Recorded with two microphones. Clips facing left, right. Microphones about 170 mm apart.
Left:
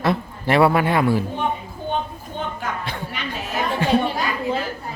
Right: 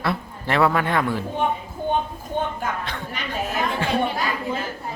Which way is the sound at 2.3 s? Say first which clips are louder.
Right 4 dB; 50° right (ahead or behind).